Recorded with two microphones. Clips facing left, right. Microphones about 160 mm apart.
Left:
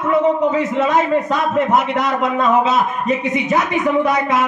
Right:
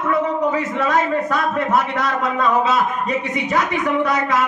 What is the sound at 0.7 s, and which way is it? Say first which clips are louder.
A man's voice: left 3 dB; 20° left (ahead or behind).